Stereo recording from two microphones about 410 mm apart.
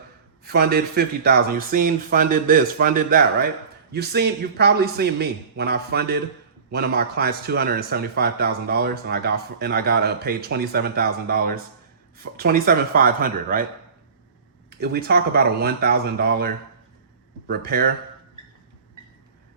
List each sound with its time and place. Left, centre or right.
0.4 s speech: right
14.8 s speech: right